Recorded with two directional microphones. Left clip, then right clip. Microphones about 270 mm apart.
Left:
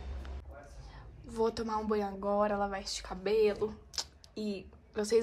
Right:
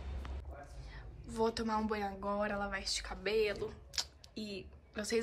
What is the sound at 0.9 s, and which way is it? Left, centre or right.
A woman's voice, centre.